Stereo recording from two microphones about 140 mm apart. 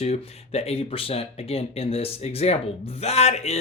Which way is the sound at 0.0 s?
50° left (ahead or behind).